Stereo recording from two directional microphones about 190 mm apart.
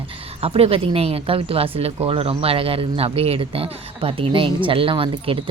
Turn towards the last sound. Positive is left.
turn(degrees=-25)  # may be behind; listen again after turning